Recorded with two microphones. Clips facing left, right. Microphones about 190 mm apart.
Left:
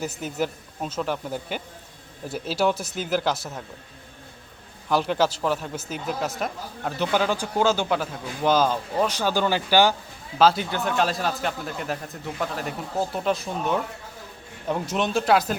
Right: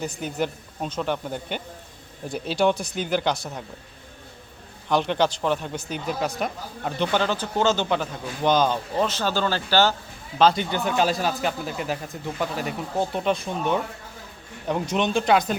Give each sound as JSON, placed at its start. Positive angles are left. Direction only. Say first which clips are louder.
{"t": 0.0, "sound": "a man's voice", "louder": "even", "side_deg": 5}
{"t": 4.9, "sound": "a man's voice", "louder": "even", "side_deg": 5}
{"t": 10.3, "sound": "a man's voice", "louder": "even", "side_deg": 5}